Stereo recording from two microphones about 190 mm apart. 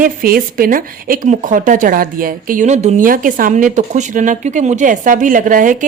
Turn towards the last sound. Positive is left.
turn(degrees=-45)  # may be behind; listen again after turning